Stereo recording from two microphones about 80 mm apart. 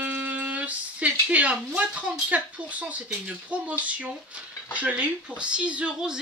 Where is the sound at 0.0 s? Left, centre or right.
Right.